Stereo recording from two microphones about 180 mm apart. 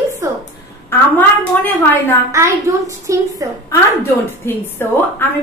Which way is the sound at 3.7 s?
15° left (ahead or behind).